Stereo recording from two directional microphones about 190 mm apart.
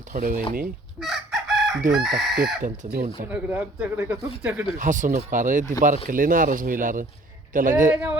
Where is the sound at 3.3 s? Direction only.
10° right (ahead or behind).